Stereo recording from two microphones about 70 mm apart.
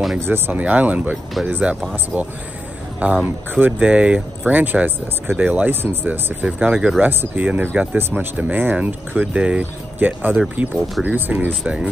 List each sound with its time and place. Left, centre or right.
0.2 s speech: right
0.6 s speech: right
3.0 s speech: right
8.0 s speech: right
11.6 s speech: centre